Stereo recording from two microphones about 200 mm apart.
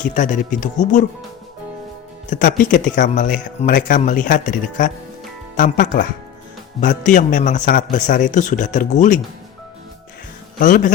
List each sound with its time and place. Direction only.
0.0 s a man's voice: 40° left (ahead or behind)
2.3 s a man's voice: 40° left (ahead or behind)
10.6 s a man's voice: 40° left (ahead or behind)